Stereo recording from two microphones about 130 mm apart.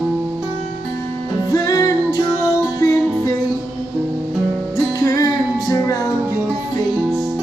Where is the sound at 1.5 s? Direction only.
25° left (ahead or behind).